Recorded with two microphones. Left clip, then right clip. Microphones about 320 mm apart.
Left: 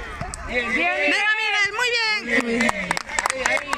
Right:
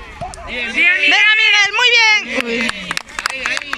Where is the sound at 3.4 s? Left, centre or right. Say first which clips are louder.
Right 2 dB; left.